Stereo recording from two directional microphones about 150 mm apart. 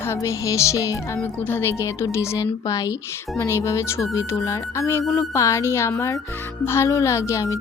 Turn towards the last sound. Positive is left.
turn(degrees=20)  # may be behind; listen again after turning